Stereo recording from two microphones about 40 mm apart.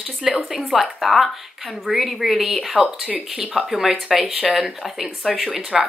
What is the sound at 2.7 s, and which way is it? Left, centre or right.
Speech, centre.